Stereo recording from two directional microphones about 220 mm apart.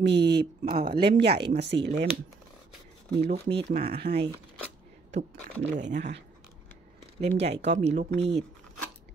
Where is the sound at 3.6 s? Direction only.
30° right (ahead or behind).